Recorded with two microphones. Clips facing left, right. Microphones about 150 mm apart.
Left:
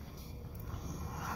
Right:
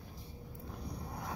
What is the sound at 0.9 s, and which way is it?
Vehicle, 30° right (ahead or behind).